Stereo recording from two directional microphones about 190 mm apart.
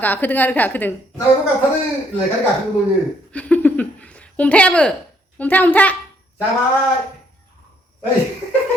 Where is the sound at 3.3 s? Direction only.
5° left (ahead or behind).